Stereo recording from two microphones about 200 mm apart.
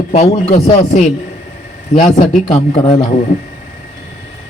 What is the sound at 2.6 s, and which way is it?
Speech, 25° left (ahead or behind).